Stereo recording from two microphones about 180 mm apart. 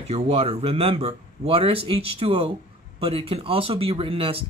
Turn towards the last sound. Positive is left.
turn(degrees=-30)  # may be behind; listen again after turning